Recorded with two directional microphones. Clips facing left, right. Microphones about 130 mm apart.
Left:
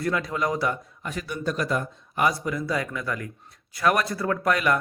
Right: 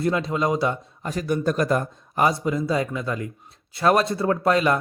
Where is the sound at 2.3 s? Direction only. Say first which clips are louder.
Right 4 dB; 25° right (ahead or behind).